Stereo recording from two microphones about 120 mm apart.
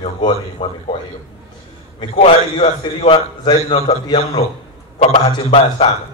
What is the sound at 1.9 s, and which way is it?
A man's voice, 50° left (ahead or behind).